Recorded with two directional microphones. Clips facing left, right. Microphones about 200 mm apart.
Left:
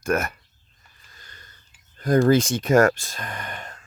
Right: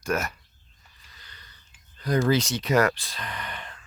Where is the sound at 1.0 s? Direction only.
45° left (ahead or behind).